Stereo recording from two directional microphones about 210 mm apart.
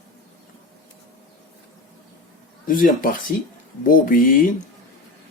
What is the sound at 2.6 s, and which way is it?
Speech, 40° left (ahead or behind).